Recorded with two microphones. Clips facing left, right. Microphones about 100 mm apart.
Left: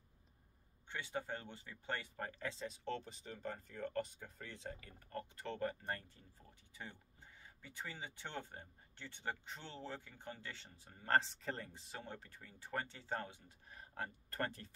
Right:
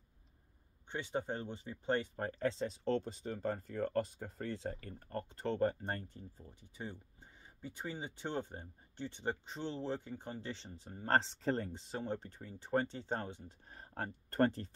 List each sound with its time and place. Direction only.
0.8 s speech: 25° right (ahead or behind)
7.4 s speech: 20° right (ahead or behind)